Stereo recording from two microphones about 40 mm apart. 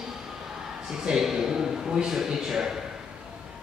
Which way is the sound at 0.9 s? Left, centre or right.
Centre.